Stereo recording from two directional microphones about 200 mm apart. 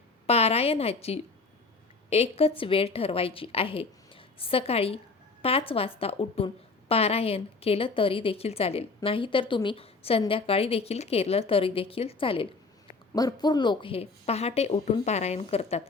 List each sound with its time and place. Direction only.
0.3 s speech: 30° left (ahead or behind)
2.0 s a woman's voice: 30° left (ahead or behind)